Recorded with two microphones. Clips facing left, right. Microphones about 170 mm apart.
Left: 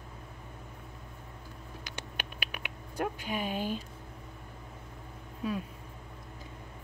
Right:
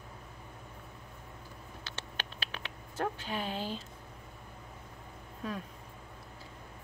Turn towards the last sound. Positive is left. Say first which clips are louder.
# left 5 dB
turn(degrees=10)  # may be behind; listen again after turning